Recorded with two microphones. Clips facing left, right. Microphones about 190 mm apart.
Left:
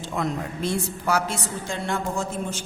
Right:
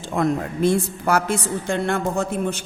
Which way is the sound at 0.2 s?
55° right (ahead or behind).